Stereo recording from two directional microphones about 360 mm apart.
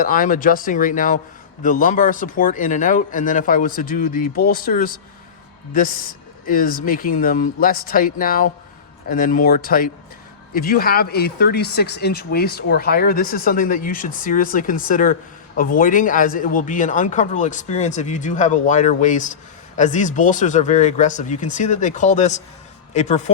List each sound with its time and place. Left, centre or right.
0.0 s speech: left